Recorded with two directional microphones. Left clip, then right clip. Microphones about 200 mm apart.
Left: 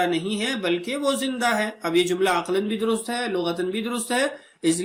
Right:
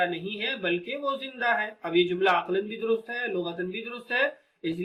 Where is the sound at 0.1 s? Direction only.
60° left (ahead or behind).